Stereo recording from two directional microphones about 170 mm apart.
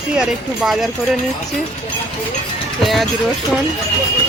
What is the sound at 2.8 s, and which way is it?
Speech, centre (ahead or behind).